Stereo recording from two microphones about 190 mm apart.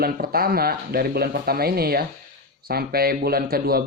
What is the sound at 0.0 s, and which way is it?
A man's voice, 50° right (ahead or behind).